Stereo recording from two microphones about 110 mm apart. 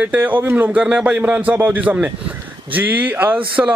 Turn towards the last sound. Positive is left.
turn(degrees=-15)  # may be behind; listen again after turning